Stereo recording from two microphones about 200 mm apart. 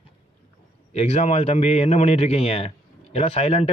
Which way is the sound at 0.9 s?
35° left (ahead or behind).